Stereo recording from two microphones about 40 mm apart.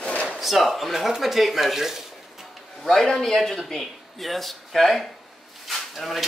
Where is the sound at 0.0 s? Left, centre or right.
Left.